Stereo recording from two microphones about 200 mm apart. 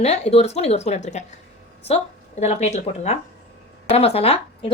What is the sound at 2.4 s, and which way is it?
A woman's voice, 35° left (ahead or behind).